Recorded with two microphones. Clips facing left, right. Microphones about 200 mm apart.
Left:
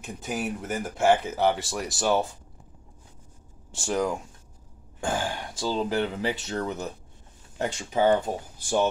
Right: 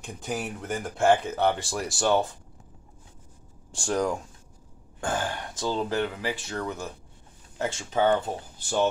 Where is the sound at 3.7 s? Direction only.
5° left (ahead or behind).